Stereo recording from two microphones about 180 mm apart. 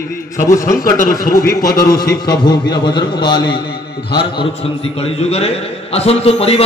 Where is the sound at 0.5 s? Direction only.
20° left (ahead or behind).